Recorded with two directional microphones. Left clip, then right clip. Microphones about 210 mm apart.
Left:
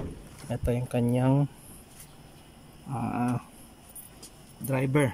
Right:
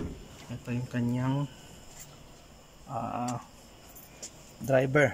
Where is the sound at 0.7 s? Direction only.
15° left (ahead or behind).